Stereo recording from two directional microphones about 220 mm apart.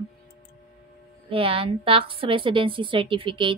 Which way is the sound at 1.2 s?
25° right (ahead or behind).